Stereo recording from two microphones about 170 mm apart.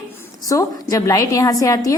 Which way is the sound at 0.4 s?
20° left (ahead or behind).